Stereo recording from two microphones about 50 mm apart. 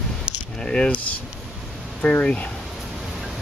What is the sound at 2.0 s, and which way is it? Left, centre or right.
Speech, left.